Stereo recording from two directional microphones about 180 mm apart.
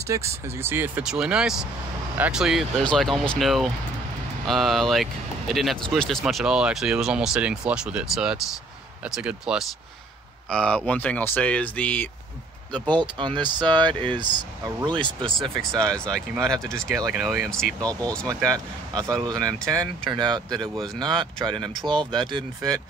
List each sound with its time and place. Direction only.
0.1 s speech: 15° right (ahead or behind); by 12.1 s 5° left (ahead or behind)
12.8 s speech: 25° right (ahead or behind)
16.4 s speech: 5° left (ahead or behind)
16.9 s speech: 15° right (ahead or behind)
17.5 s speech: 5° left (ahead or behind)
18.2 s speech: 20° right (ahead or behind)
21.7 s speech: 5° left (ahead or behind)
22.1 s speech: 25° right (ahead or behind)